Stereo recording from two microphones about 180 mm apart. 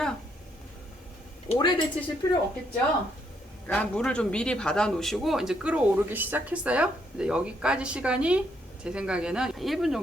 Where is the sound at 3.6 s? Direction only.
5° left (ahead or behind).